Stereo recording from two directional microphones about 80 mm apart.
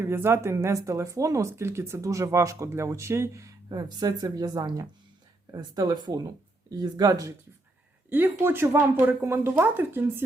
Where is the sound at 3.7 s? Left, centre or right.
Right.